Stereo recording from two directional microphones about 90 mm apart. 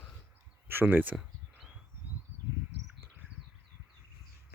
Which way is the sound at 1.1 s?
5° right (ahead or behind).